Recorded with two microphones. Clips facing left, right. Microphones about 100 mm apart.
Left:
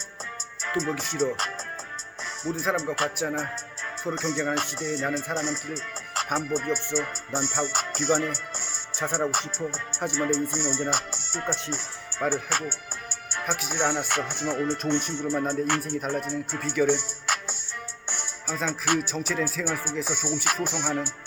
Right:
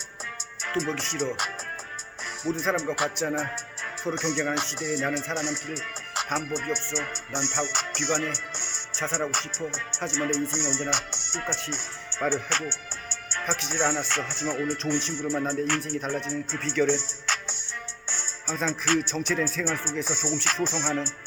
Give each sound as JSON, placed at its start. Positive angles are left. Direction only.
{"t": 0.9, "sound": "music", "side_deg": 5}
{"t": 9.0, "sound": "music", "side_deg": 15}
{"t": 11.7, "sound": "speech", "side_deg": 5}
{"t": 16.0, "sound": "music", "side_deg": 10}